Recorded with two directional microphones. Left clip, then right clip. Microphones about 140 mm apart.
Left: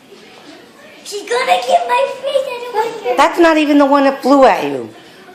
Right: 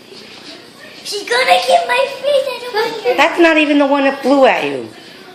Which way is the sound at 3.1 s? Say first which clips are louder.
Left 1 dB; 10° left (ahead or behind).